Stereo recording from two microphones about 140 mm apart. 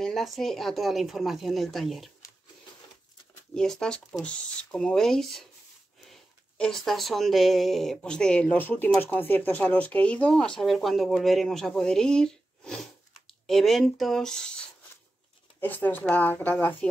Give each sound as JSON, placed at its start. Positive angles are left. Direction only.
{"t": 0.0, "sound": "speech", "side_deg": 0}
{"t": 3.5, "sound": "speech", "side_deg": 5}
{"t": 6.6, "sound": "speech", "side_deg": 5}
{"t": 15.6, "sound": "speech", "side_deg": 15}